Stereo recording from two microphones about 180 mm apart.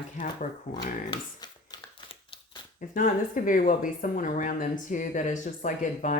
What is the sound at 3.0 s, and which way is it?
Speech, 50° left (ahead or behind).